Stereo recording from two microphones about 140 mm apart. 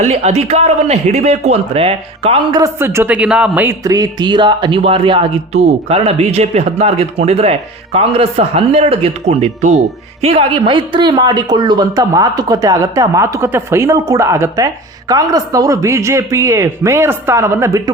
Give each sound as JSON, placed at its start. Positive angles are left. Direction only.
{"t": 0.0, "sound": "speech", "side_deg": -50}
{"t": 2.7, "sound": "a woman's voice", "side_deg": -15}
{"t": 3.8, "sound": "speech", "side_deg": -25}
{"t": 5.5, "sound": "a man's voice", "side_deg": -50}